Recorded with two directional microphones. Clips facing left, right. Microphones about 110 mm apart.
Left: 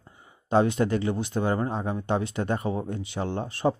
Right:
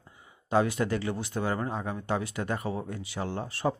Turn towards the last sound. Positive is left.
turn(degrees=25)  # may be behind; listen again after turning